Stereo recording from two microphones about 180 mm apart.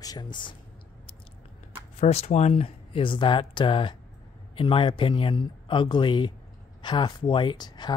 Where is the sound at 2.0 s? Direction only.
35° left (ahead or behind).